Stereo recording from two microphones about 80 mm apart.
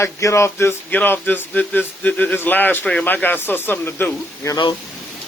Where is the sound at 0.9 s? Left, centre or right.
Left.